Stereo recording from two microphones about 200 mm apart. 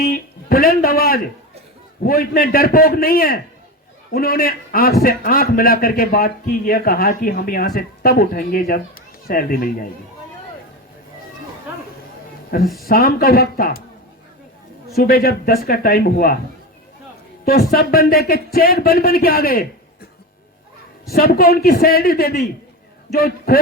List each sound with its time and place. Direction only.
0.0 s a man's voice: 45° left (ahead or behind)
12.6 s speech: centre (ahead or behind)
12.9 s a man's voice: 45° left (ahead or behind)
14.9 s a man's voice: 50° left (ahead or behind)
17.4 s a man's voice: 50° left (ahead or behind)
21.1 s a man's voice: 50° left (ahead or behind)